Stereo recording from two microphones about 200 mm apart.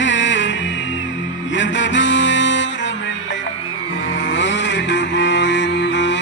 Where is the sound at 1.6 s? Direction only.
65° left (ahead or behind).